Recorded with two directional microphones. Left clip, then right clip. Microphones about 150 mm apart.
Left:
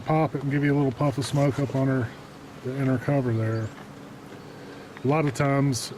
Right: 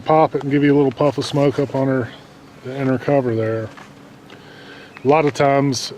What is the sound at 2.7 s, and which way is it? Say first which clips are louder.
Speech: right 9 dB; 50° right (ahead or behind).